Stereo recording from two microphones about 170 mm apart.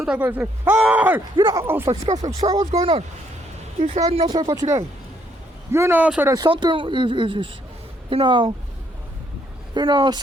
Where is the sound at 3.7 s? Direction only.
45° right (ahead or behind).